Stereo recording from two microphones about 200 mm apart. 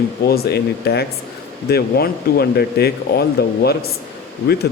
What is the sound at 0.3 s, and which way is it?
Speech, 50° left (ahead or behind).